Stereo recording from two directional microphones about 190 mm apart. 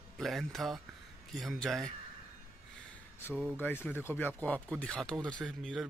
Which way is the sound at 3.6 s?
10° left (ahead or behind).